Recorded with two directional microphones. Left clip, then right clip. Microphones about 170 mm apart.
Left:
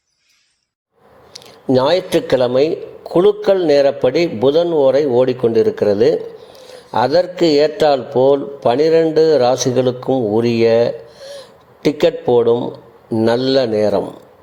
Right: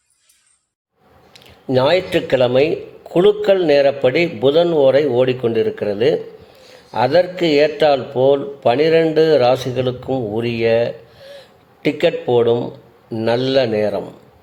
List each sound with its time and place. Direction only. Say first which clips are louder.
1.6 s a man's voice: left 1 dB; 15° left (ahead or behind)